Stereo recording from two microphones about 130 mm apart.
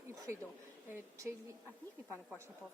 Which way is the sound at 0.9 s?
20° right (ahead or behind).